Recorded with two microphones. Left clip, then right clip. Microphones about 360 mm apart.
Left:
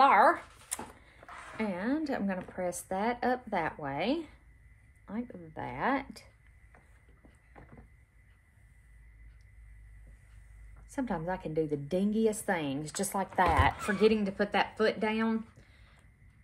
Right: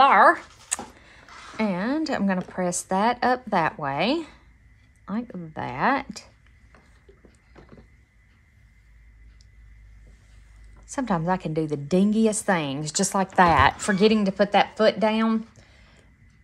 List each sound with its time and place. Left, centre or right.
0.0 s a sound: right
5.1 s a woman's voice: right
10.9 s a woman's voice: right